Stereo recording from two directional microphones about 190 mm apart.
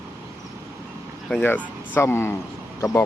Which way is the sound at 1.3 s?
10° left (ahead or behind).